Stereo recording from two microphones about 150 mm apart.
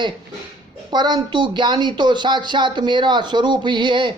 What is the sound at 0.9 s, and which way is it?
A man's voice, 30° right (ahead or behind).